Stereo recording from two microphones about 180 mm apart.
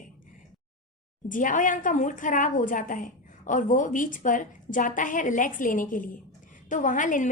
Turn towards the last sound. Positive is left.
turn(degrees=45)  # may be behind; listen again after turning